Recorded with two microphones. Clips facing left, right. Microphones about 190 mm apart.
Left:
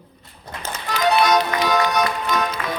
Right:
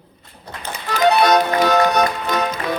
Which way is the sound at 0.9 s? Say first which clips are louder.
Right 3 dB; 50° right (ahead or behind).